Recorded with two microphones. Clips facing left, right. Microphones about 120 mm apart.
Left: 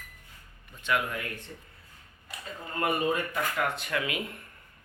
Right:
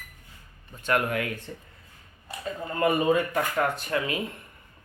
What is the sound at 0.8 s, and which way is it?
Speech, 55° right (ahead or behind).